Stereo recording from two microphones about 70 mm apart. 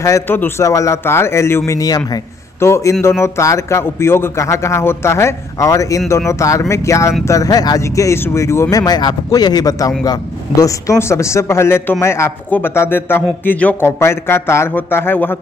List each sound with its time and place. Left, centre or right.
0.6 s a man's voice: left
1.0 s a man's voice: left
1.7 s a man's voice: left
2.6 s a man's voice: left
7.2 s a man's voice: left
7.8 s a man's voice: left
8.7 s a man's voice: left
11.0 s a man's voice: left
12.4 s speech: left
12.7 s speech: left
13.8 s a man's voice: left